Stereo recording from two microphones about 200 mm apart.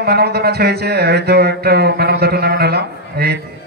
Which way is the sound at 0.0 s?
50° right (ahead or behind).